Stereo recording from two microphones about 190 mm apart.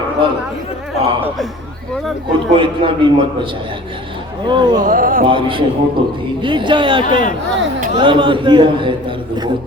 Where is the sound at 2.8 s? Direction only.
30° right (ahead or behind).